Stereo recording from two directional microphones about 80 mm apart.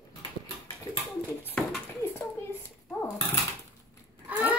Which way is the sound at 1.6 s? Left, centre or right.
Centre.